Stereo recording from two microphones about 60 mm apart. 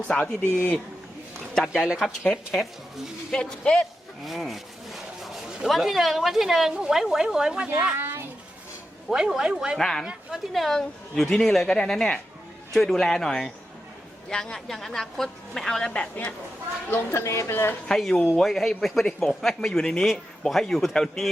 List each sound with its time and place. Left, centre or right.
0.1 s a woman's voice: centre
1.8 s speech: centre
2.3 s speech: centre
3.3 s speech: centre
4.2 s speech: centre
7.9 s a sound: right
9.0 s speech: centre
9.7 s speech: centre
15.9 s a woman's voice: left
16.9 s speech: left
17.8 s speech: centre